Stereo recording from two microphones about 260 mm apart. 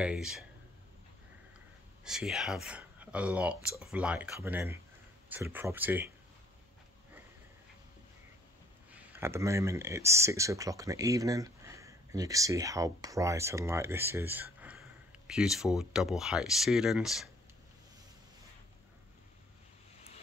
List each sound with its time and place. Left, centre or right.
0.0 s speech: centre
2.0 s speech: centre
8.9 s speech: centre